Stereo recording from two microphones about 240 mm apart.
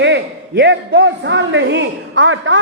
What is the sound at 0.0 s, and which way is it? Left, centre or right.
A man's voice, right.